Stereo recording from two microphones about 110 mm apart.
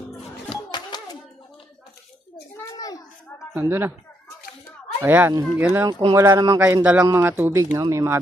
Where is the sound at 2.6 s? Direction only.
35° left (ahead or behind).